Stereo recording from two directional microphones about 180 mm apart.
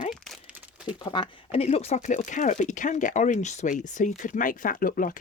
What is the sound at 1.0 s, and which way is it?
Speech, 25° left (ahead or behind).